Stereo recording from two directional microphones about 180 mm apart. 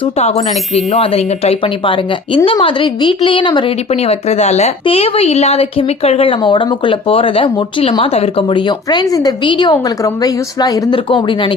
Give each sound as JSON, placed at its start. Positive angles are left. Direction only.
{"t": 0.0, "sound": "speech", "side_deg": 35}